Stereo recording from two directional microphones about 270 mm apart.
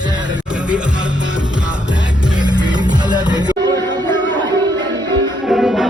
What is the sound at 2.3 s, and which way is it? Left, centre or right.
Music, centre.